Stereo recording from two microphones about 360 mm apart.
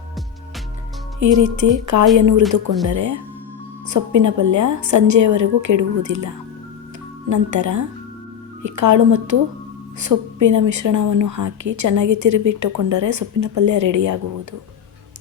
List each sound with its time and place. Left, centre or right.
1.2 s a woman's voice: right